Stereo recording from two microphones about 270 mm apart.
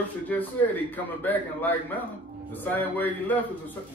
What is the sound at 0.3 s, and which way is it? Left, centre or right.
A man's voice, centre.